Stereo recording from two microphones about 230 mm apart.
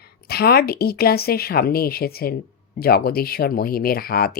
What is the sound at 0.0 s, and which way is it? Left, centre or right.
A woman's voice, left.